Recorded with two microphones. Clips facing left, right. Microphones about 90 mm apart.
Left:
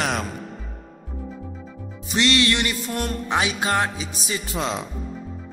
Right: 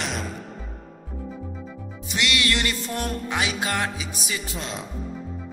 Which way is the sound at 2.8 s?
5° left (ahead or behind).